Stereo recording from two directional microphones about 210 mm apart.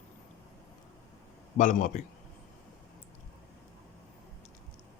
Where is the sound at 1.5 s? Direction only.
35° left (ahead or behind).